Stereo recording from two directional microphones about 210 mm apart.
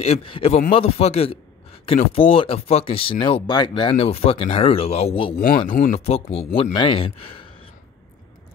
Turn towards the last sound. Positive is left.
turn(degrees=25)  # may be behind; listen again after turning